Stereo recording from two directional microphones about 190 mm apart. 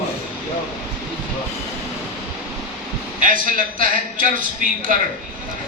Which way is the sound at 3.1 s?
45° right (ahead or behind).